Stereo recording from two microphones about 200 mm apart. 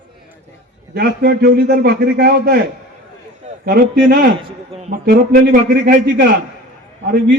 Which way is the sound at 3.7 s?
45° right (ahead or behind).